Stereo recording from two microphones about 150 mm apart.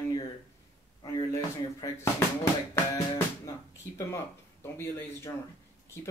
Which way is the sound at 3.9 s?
15° left (ahead or behind).